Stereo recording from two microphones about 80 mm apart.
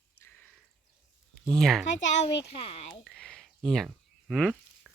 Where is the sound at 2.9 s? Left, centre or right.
Centre.